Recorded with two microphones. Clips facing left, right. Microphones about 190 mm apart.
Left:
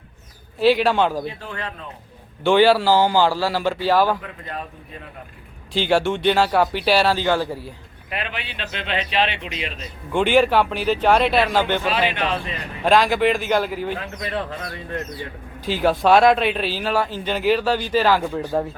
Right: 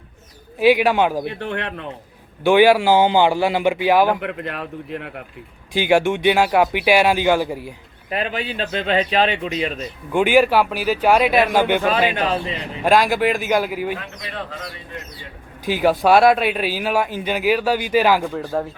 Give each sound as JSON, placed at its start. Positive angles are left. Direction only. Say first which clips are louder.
{"t": 0.6, "sound": "a man's voice", "louder": "right 2 dB", "side_deg": -15}
{"t": 1.2, "sound": "speech", "louder": "right 5 dB", "side_deg": -65}
{"t": 2.4, "sound": "a man's voice", "louder": "right 2 dB", "side_deg": -10}
{"t": 4.2, "sound": "speech", "louder": "right 6 dB", "side_deg": -70}
{"t": 5.7, "sound": "a man's voice", "louder": "right 2 dB", "side_deg": -10}
{"t": 8.1, "sound": "a man's voice", "louder": "right 6 dB", "side_deg": -40}
{"t": 10.1, "sound": "a man's voice", "louder": "right 2 dB", "side_deg": -10}
{"t": 12.1, "sound": "a man's voice", "louder": "right 3 dB", "side_deg": -40}
{"t": 12.8, "sound": "a man's voice", "louder": "even", "side_deg": -10}
{"t": 15.6, "sound": "a man's voice", "louder": "right 2 dB", "side_deg": -10}
{"t": 18.2, "sound": "speech", "louder": "even", "side_deg": 0}